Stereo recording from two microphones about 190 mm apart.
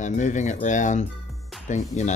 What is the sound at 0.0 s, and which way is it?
Speech, 40° left (ahead or behind).